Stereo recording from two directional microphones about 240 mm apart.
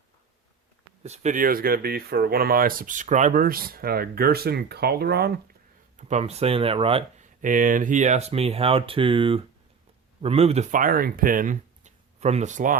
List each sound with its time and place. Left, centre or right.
1.0 s speech: right
6.0 s speech: right